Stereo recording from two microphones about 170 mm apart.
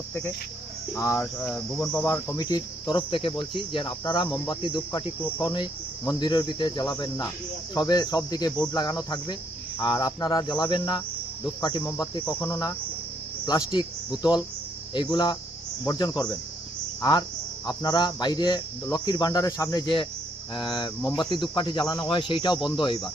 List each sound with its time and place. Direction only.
0.1 s speech: 10° left (ahead or behind)
1.9 s cricket: 10° left (ahead or behind); by 11.0 s 30° left (ahead or behind)
11.8 s speech: 10° left (ahead or behind)
14.2 s cricket: 25° left (ahead or behind)
17.0 s speech: 25° left (ahead or behind)
17.7 s cricket: 25° left (ahead or behind)